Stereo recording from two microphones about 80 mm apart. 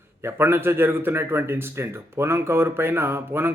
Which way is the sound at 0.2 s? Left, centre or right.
Right.